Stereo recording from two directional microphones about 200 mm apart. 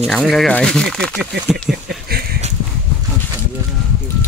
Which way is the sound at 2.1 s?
50° right (ahead or behind).